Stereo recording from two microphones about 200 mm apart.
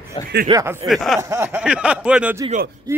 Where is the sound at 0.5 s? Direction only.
15° right (ahead or behind).